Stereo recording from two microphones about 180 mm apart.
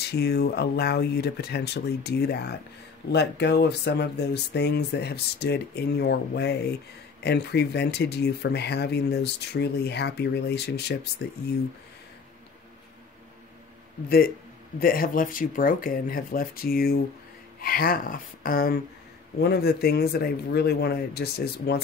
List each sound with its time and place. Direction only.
0.0 s speech: 65° left (ahead or behind)
14.0 s speech: 60° left (ahead or behind)
19.4 s speech: 65° left (ahead or behind)